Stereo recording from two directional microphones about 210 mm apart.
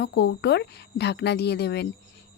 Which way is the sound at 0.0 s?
55° left (ahead or behind).